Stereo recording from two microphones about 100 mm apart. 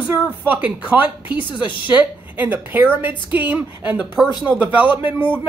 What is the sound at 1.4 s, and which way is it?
Speech, 55° left (ahead or behind).